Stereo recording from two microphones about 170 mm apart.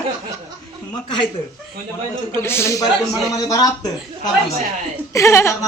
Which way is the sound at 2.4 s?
15° left (ahead or behind).